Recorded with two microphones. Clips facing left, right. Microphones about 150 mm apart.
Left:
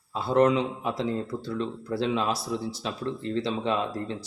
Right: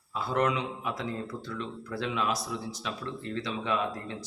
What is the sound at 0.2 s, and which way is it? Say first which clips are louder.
Speech: left 7 dB; 30° left (ahead or behind).